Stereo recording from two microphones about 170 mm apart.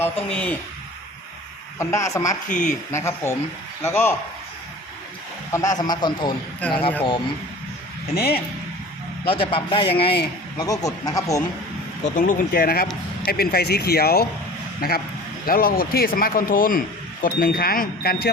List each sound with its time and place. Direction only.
0.3 s speech: 10° left (ahead or behind)
1.8 s speech: 15° left (ahead or behind)
2.5 s speech: 45° left (ahead or behind)
2.9 s speech: 15° left (ahead or behind)
5.5 s a man's voice: 20° left (ahead or behind)
8.1 s speech: 65° left (ahead or behind)
9.2 s speech: 30° left (ahead or behind)
10.6 s a man's voice: 20° left (ahead or behind)
12.0 s speech: 50° left (ahead or behind)